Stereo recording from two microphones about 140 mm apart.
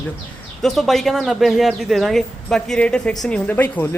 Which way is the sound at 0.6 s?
Centre (ahead or behind).